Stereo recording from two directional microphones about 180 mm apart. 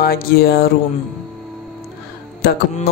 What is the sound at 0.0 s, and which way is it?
Speech, 55° left (ahead or behind).